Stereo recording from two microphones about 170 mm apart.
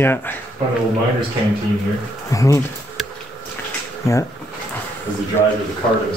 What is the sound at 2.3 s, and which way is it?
Speech, 20° left (ahead or behind).